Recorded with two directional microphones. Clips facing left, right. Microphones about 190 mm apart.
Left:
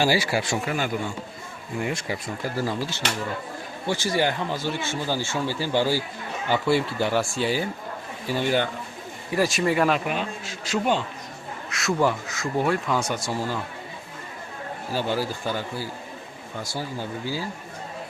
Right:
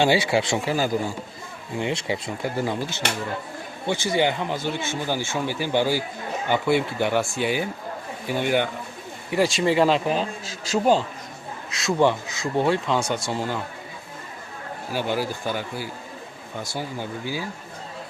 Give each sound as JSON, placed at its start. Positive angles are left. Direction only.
{"t": 0.0, "sound": "speech", "side_deg": -25}
{"t": 3.8, "sound": "speech", "side_deg": -20}
{"t": 9.3, "sound": "speech", "side_deg": -25}
{"t": 11.9, "sound": "speech", "side_deg": -25}
{"t": 14.9, "sound": "speech", "side_deg": -15}